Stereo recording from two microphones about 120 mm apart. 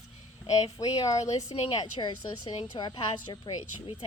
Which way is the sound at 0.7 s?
30° left (ahead or behind).